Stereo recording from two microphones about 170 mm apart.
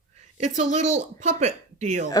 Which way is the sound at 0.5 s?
45° right (ahead or behind).